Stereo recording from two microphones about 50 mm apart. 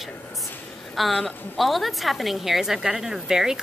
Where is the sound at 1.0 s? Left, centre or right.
Centre.